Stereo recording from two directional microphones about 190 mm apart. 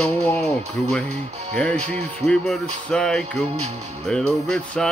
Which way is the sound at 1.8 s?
35° right (ahead or behind).